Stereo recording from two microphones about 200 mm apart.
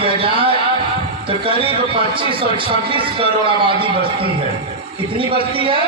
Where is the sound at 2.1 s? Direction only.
25° right (ahead or behind).